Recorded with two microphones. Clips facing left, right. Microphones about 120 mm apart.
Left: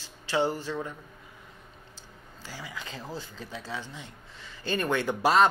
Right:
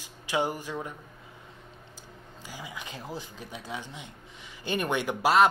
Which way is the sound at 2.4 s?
15° right (ahead or behind).